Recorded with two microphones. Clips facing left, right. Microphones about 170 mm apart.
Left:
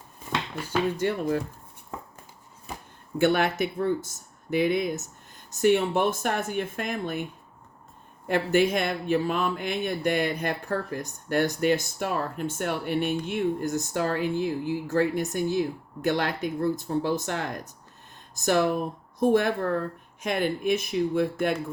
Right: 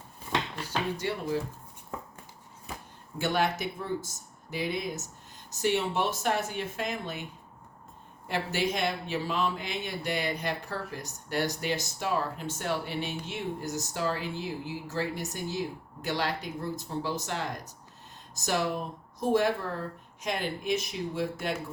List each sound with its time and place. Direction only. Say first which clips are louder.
0.9 s speech: left 5 dB; 50° left (ahead or behind)
3.2 s speech: left 6 dB; 55° left (ahead or behind)
8.3 s speech: left 8 dB; 55° left (ahead or behind)